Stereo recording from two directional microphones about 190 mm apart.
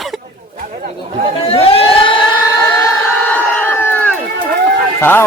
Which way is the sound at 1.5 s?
30° left (ahead or behind).